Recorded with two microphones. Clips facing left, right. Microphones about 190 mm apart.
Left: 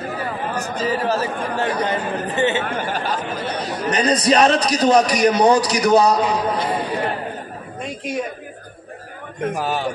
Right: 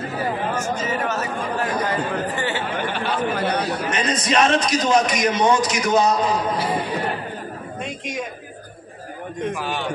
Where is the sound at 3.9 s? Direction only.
35° left (ahead or behind).